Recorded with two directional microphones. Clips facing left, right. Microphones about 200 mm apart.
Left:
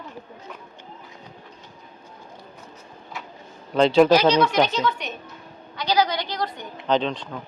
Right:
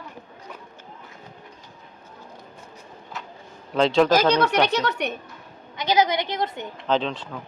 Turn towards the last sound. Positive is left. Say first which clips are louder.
# left 1 dB
turn(degrees=0)  # may be behind; listen again after turning